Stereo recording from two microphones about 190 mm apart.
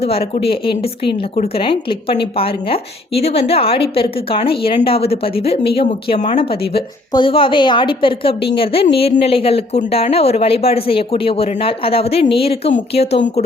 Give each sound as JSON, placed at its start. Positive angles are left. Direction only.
{"t": 0.5, "sound": "speech", "side_deg": 30}